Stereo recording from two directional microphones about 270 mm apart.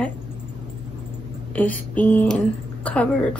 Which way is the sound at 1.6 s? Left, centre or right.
Centre.